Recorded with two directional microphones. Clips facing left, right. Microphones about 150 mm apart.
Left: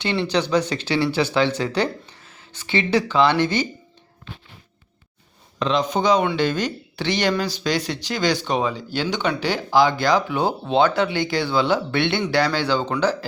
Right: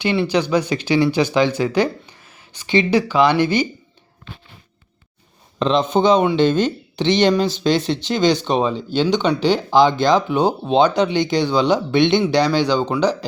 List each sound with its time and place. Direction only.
0.3 s speech: 10° right (ahead or behind)
5.5 s speech: 30° right (ahead or behind)